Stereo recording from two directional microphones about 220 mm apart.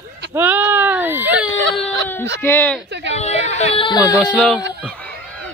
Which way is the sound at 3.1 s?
30° left (ahead or behind).